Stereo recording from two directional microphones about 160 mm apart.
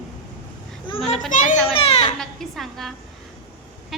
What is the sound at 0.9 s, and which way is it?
Children playing, 30° left (ahead or behind).